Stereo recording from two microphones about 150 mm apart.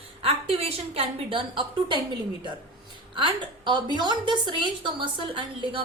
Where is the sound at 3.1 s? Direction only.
30° right (ahead or behind).